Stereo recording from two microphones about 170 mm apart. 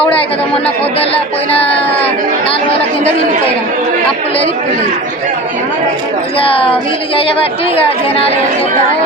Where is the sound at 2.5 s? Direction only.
35° left (ahead or behind).